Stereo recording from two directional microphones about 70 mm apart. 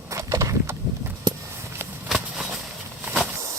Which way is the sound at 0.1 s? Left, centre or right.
Right.